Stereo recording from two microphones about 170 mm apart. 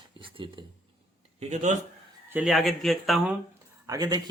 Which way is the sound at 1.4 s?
45° right (ahead or behind).